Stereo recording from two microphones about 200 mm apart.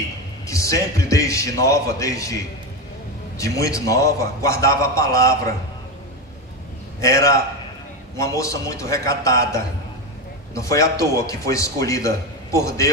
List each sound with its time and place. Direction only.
0.5 s a man's voice: 15° left (ahead or behind)
3.3 s a man's voice: 15° left (ahead or behind)
7.0 s a man's voice: 15° left (ahead or behind)